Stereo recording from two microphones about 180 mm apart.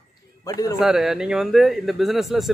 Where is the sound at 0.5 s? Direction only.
20° left (ahead or behind).